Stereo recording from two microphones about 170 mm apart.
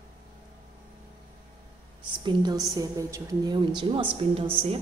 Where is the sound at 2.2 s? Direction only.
25° right (ahead or behind).